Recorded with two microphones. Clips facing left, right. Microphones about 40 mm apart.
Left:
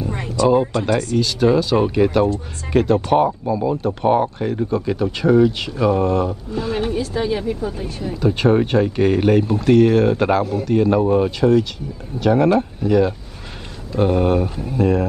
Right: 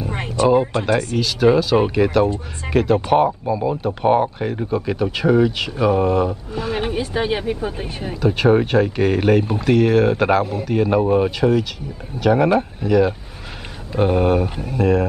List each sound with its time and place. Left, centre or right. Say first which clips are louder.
0.1 s a sound: right 1 dB; right
1.1 s speech: right 1 dB; centre
6.8 s speech: right 1 dB; right
8.4 s speech: right 1 dB; centre